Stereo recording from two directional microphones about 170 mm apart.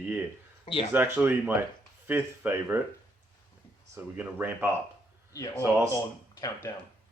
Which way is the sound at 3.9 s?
10° right (ahead or behind).